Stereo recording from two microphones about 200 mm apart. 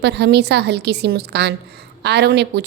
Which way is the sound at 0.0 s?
55° right (ahead or behind).